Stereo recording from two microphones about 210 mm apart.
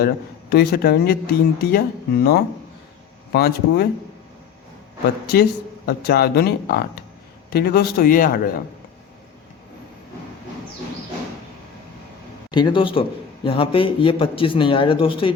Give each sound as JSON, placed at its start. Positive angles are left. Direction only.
{"t": 0.5, "sound": "speech", "side_deg": 50}
{"t": 5.2, "sound": "speech", "side_deg": 45}
{"t": 12.5, "sound": "a man's voice", "side_deg": 20}